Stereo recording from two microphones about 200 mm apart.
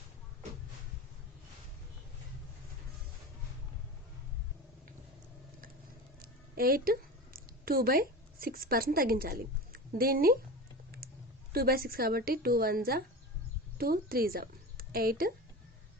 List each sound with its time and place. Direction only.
6.2 s a sound: 45° right (ahead or behind)
7.6 s speech: 45° right (ahead or behind)
11.5 s a woman's voice: 50° right (ahead or behind)